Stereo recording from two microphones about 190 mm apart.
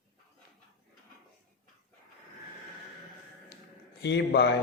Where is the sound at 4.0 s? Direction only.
65° left (ahead or behind).